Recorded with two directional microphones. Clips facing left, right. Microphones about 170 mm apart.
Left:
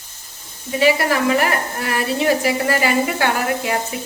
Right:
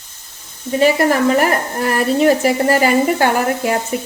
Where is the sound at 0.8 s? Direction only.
45° right (ahead or behind).